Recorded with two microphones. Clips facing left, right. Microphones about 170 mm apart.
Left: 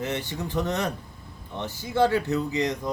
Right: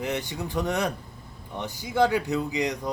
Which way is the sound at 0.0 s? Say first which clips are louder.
Even; 15° right (ahead or behind).